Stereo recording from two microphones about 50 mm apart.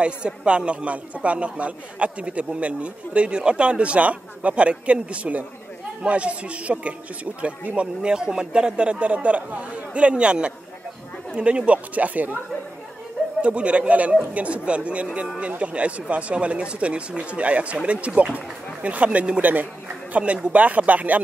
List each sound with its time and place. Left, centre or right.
0.0 s a man's voice: right
13.4 s a man's voice: right